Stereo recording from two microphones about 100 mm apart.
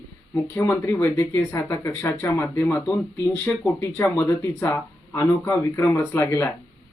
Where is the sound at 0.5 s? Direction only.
20° left (ahead or behind).